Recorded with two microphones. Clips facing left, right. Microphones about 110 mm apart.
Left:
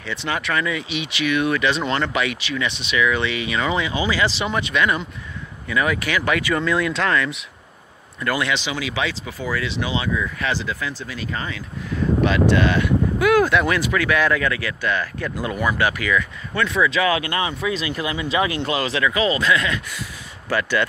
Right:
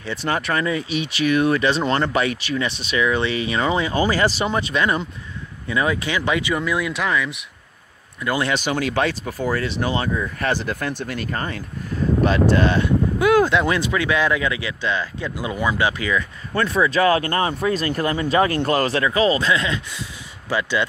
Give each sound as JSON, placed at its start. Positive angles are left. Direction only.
{"t": 0.0, "sound": "speech", "side_deg": -40}
{"t": 8.4, "sound": "speech", "side_deg": -45}